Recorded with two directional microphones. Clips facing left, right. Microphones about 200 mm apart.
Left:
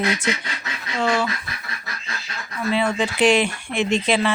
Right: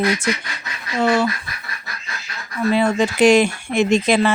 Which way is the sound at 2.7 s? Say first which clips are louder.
Right 4 dB; 40° right (ahead or behind).